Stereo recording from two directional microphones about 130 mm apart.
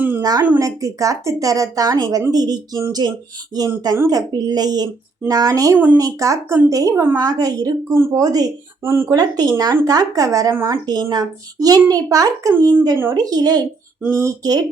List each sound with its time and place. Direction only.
0.2 s a woman's voice: 30° right (ahead or behind)
5.7 s speech: 15° right (ahead or behind)
6.0 s a woman's voice: 25° right (ahead or behind)
7.2 s a woman's voice: 30° right (ahead or behind)
10.8 s a woman's voice: 30° right (ahead or behind)